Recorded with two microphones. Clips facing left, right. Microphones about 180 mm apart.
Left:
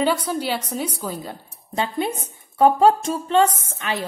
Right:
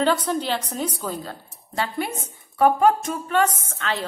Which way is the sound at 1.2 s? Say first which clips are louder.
Left 1 dB; 15° left (ahead or behind).